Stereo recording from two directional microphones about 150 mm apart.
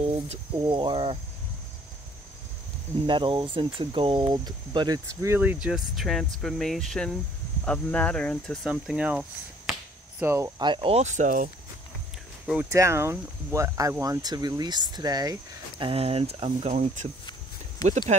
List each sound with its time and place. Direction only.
0.6 s speech: 30° right (ahead or behind)
3.1 s speech: 35° right (ahead or behind); by 8.5 s 5° left (ahead or behind)
8.6 s finger snapping: 5° right (ahead or behind)
10.2 s speech: 20° right (ahead or behind)
10.6 s speech: 35° right (ahead or behind); by 11.5 s 60° right (ahead or behind)
12.7 s speech: 20° right (ahead or behind)
15.8 s speech: 40° right (ahead or behind)